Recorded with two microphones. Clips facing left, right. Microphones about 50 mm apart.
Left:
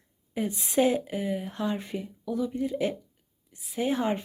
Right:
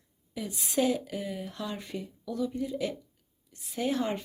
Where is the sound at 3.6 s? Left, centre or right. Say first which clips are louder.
Left 3 dB; centre.